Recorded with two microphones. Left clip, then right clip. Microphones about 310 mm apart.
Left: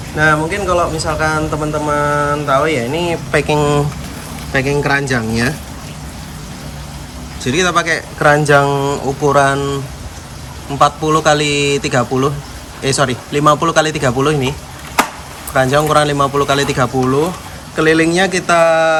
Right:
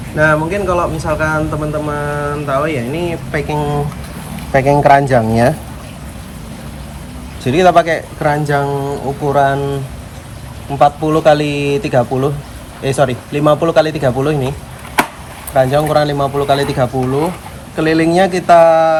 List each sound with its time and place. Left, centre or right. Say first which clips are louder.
0.2 s speech: right 1 dB; centre
4.5 s speech: right 6 dB; centre
7.4 s speech: right 4 dB; centre
8.7 s speech: left 3 dB; left
9.2 s speech: left 1 dB; centre
10.8 s speech: right 1 dB; centre
15.5 s speech: even; centre